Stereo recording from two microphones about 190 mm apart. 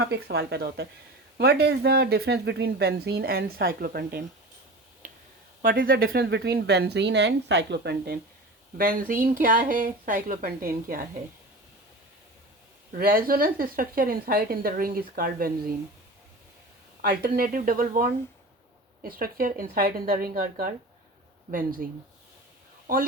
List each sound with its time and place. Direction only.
0.0 s speech: 60° right (ahead or behind)
5.0 s a sound: 40° right (ahead or behind)
5.6 s speech: 50° right (ahead or behind)
12.9 s speech: 50° right (ahead or behind)
17.0 s speech: 55° right (ahead or behind)